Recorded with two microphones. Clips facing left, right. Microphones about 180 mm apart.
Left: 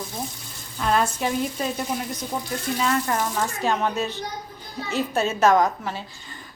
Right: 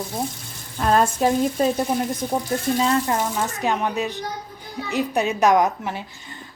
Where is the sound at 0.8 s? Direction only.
45° right (ahead or behind).